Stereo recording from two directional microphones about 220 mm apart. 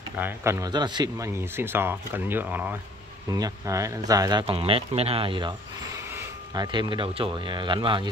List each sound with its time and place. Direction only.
0.2 s speech: 10° right (ahead or behind)